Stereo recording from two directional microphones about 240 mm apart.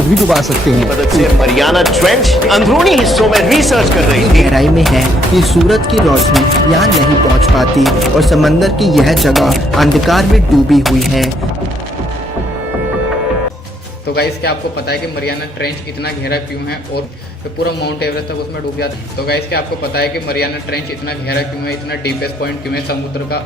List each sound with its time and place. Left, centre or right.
0.1 s speech: centre
14.2 s a man's voice: left
17.6 s a man's voice: left
22.7 s a man's voice: left